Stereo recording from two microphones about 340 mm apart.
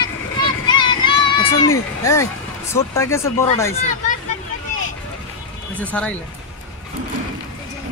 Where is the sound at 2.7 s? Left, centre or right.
Centre.